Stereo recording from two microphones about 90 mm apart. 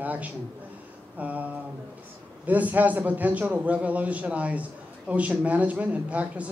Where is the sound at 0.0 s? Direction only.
15° right (ahead or behind).